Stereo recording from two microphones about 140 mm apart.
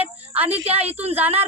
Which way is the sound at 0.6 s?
45° right (ahead or behind).